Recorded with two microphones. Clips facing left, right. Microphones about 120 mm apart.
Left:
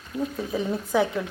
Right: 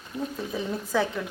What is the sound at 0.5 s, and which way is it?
Speech, 10° left (ahead or behind).